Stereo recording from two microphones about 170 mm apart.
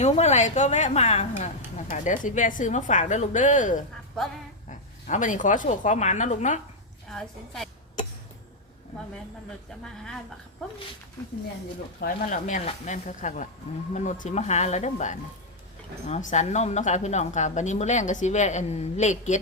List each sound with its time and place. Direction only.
0.0 s a woman's voice: 40° left (ahead or behind)
7.1 s a woman's voice: centre (ahead or behind)
9.8 s a woman's voice: 5° left (ahead or behind)
11.9 s speech: 50° left (ahead or behind)